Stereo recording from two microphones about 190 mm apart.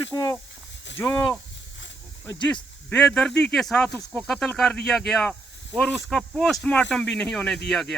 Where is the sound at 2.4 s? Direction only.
5° left (ahead or behind).